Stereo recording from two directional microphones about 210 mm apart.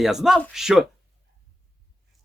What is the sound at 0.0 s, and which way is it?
Speech, centre (ahead or behind).